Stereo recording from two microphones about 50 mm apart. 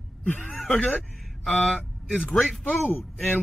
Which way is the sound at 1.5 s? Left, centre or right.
Left.